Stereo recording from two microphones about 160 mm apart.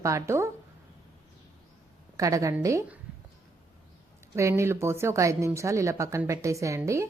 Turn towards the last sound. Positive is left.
turn(degrees=-20)  # may be behind; listen again after turning